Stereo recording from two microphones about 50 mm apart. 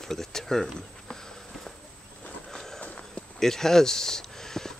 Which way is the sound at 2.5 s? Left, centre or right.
Centre.